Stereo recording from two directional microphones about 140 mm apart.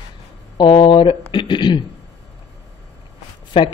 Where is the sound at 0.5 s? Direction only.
35° left (ahead or behind).